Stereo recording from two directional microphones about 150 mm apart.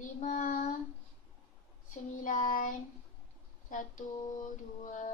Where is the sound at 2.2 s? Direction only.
60° left (ahead or behind).